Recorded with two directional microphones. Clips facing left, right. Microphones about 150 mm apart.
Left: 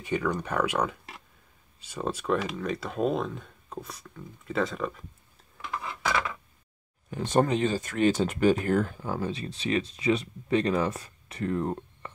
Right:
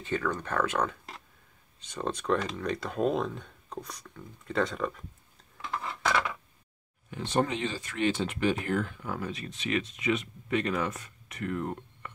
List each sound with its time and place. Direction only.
0.0 s speech: 15° left (ahead or behind)
5.6 s a sound: 5° left (ahead or behind)
7.1 s speech: 45° left (ahead or behind)